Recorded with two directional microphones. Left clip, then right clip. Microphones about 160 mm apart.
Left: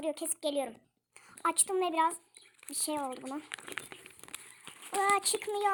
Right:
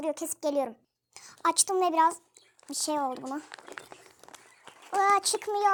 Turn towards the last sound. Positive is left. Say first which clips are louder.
# right 5 dB
turn(degrees=-15)  # may be behind; listen again after turning